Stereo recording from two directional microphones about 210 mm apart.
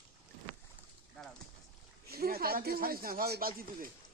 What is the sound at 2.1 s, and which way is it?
Speech, 45° right (ahead or behind).